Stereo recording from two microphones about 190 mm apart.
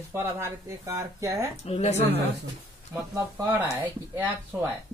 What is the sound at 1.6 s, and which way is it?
Speech, 35° left (ahead or behind).